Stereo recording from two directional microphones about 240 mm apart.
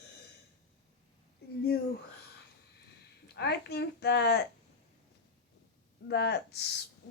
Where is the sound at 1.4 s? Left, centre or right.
Left.